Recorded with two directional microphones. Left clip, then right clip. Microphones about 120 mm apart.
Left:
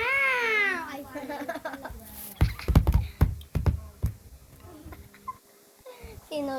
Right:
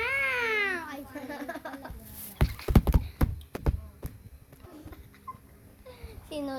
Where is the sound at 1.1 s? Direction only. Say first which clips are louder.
Left 5 dB; 30° left (ahead or behind).